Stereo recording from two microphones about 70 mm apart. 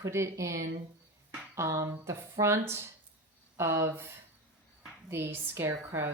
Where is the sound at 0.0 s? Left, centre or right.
Right.